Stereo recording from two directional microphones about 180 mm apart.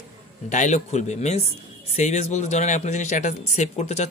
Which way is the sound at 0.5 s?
40° left (ahead or behind).